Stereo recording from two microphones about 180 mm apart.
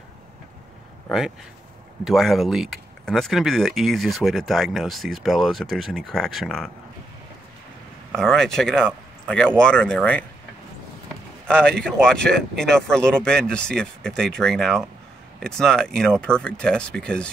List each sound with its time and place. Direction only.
1.1 s speech: centre (ahead or behind)
8.2 s speech: 5° left (ahead or behind)
11.4 s speech: 5° left (ahead or behind)